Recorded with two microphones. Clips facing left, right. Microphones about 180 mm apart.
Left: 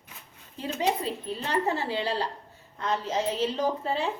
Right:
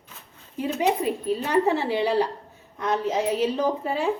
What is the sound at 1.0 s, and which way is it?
A woman's voice, 15° right (ahead or behind).